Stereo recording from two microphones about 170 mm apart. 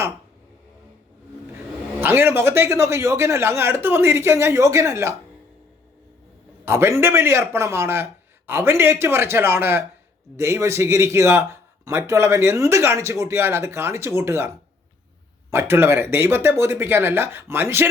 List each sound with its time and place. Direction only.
2.0 s speech: 15° right (ahead or behind)
6.7 s speech: 15° right (ahead or behind)